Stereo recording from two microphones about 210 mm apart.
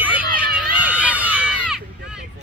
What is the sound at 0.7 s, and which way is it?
Run, 5° right (ahead or behind).